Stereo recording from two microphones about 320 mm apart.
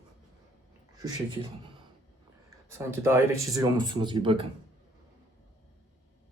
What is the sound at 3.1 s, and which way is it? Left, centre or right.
Speech, centre.